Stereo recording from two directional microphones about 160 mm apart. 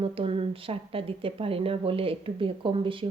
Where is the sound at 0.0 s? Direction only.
35° right (ahead or behind).